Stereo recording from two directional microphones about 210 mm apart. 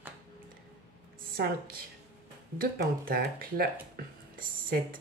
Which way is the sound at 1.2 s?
45° right (ahead or behind).